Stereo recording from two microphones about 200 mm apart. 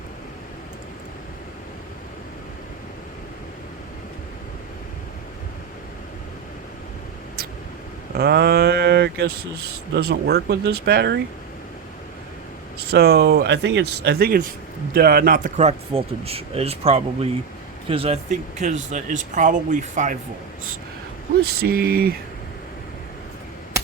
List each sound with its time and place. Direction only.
8.1 s speech: 50° right (ahead or behind)
12.8 s speech: 50° right (ahead or behind)
21.4 s speech: 50° right (ahead or behind)